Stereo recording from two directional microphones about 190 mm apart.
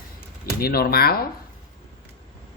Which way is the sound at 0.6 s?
55° left (ahead or behind).